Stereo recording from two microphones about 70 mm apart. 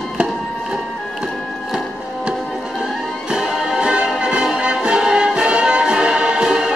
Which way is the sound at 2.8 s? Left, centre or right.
Centre.